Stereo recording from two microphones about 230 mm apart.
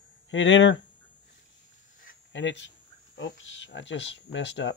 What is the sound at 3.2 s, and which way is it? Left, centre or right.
Speech, left.